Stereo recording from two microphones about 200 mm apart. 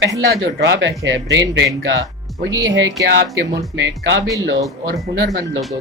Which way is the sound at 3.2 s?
15° right (ahead or behind).